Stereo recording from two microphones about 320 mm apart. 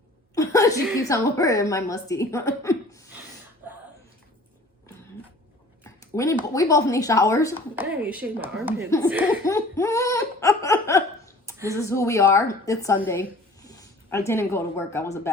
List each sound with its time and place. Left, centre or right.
0.3 s a woman's voice: centre
3.6 s a sound: centre
5.8 s a woman's voice: centre
7.8 s speech: centre
9.5 s laughter: centre
11.7 s speech: centre
13.6 s a sound: centre
14.3 s speech: centre